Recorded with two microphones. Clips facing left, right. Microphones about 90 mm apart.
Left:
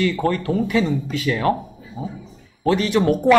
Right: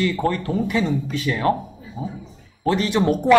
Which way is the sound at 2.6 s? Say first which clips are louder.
Left 2 dB; 25° right (ahead or behind).